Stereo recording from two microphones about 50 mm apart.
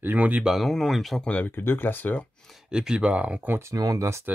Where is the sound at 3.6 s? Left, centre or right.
Right.